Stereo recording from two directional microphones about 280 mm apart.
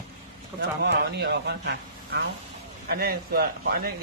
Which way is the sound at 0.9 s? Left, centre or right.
Right.